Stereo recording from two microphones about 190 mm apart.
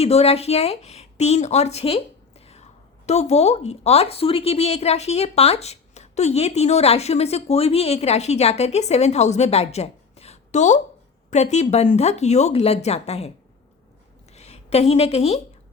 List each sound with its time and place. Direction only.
0.0 s speech: 35° left (ahead or behind)
3.1 s speech: 35° left (ahead or behind)
14.3 s a woman's voice: 35° left (ahead or behind)